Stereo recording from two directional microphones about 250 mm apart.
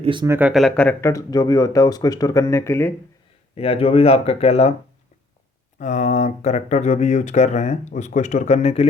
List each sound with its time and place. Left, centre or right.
0.0 s speech: centre
0.3 s speech: centre
3.5 s speech: left
5.8 s speech: left